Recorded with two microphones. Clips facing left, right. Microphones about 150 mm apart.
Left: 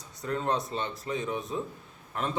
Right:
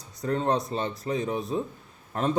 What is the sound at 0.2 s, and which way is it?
A man's voice, 35° right (ahead or behind).